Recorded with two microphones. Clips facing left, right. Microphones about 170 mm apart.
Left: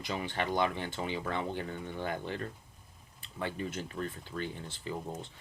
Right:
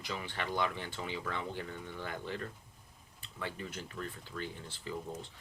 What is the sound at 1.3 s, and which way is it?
Speech, 55° left (ahead or behind).